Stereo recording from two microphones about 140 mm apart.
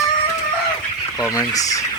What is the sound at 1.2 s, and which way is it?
Speech, 25° left (ahead or behind).